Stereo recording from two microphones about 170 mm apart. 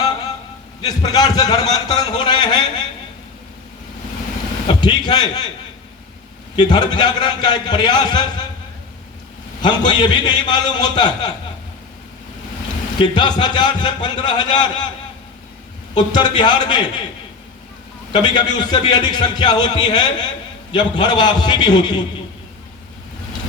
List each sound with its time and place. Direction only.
0.8 s a man's voice: 25° left (ahead or behind)
4.7 s a man's voice: 25° left (ahead or behind)
6.6 s a man's voice: 25° left (ahead or behind)
9.6 s a man's voice: 25° left (ahead or behind)
13.0 s a man's voice: 25° left (ahead or behind)
16.0 s a man's voice: 25° left (ahead or behind)
18.1 s a man's voice: 25° left (ahead or behind)